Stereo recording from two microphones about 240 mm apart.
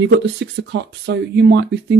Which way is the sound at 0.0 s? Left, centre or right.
Right.